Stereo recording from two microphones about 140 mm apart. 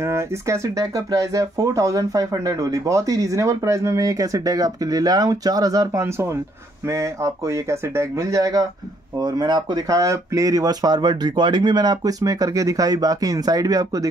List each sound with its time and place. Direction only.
0.0 s speech: 20° right (ahead or behind)